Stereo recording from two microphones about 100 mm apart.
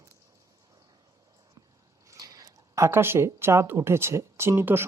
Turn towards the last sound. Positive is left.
turn(degrees=-25)  # may be behind; listen again after turning